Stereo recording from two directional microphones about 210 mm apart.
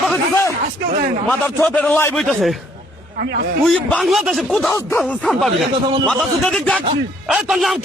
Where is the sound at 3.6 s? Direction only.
Centre (ahead or behind).